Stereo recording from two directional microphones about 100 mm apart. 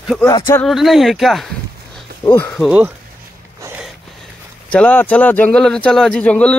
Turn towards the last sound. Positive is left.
turn(degrees=10)  # may be behind; listen again after turning